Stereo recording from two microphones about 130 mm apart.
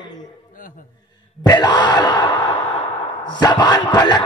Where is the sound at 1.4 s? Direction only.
35° left (ahead or behind).